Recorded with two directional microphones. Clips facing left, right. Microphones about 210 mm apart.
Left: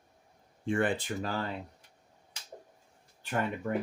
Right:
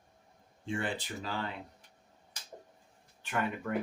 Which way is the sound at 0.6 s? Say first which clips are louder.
Left 6 dB; 55° left (ahead or behind).